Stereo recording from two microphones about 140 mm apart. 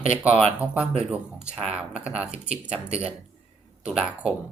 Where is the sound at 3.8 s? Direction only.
10° right (ahead or behind).